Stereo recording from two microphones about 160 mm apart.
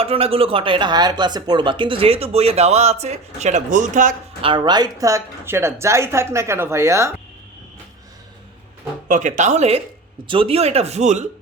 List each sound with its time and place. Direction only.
0.0 s speech: 35° right (ahead or behind); by 4.1 s 50° right (ahead or behind)
4.4 s a woman's voice: 30° right (ahead or behind)
9.0 s speech: 50° right (ahead or behind)